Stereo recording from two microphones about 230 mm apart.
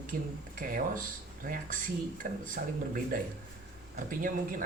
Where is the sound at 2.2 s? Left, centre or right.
Right.